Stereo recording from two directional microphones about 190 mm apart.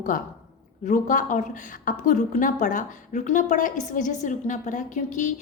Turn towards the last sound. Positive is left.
turn(degrees=40)  # may be behind; listen again after turning